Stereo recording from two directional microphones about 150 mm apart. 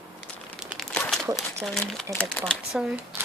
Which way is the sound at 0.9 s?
5° left (ahead or behind).